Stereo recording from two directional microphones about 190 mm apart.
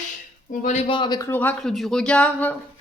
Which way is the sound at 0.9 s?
25° left (ahead or behind).